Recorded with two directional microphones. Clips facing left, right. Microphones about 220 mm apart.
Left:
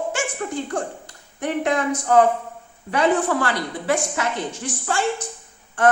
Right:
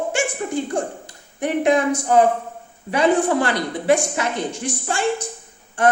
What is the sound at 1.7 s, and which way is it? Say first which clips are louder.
A woman's voice: right 3 dB; 15° right (ahead or behind).